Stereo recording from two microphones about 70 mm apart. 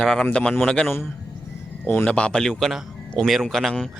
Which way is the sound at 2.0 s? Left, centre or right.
Centre.